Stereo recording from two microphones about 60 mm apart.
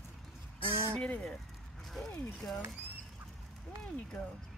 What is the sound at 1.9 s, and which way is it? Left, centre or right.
Speech, centre.